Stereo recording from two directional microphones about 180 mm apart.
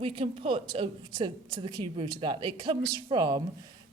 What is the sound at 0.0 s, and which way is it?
A woman's voice, 30° right (ahead or behind).